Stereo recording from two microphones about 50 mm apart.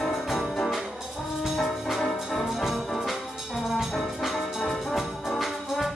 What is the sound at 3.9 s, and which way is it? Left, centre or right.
Music, centre.